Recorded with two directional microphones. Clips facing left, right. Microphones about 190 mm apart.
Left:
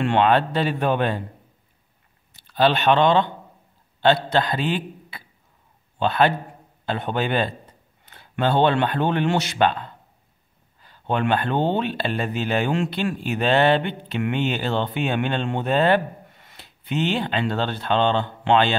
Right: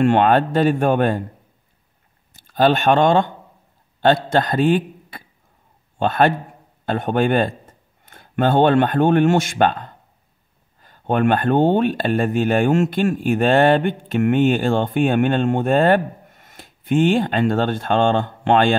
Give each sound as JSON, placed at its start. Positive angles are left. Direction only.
{"t": 0.0, "sound": "speech", "side_deg": -45}
{"t": 2.3, "sound": "a man's voice", "side_deg": -45}